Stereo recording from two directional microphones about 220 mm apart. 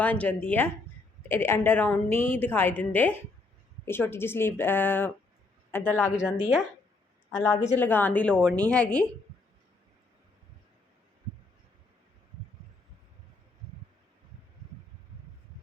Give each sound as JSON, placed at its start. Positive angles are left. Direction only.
{"t": 0.0, "sound": "a woman's voice", "side_deg": 10}
{"t": 7.3, "sound": "a woman's voice", "side_deg": 10}